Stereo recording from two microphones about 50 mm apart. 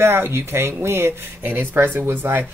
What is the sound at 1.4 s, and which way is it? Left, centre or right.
Speech, right.